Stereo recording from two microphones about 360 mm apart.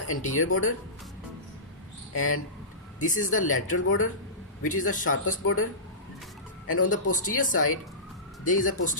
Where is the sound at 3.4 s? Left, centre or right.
Left.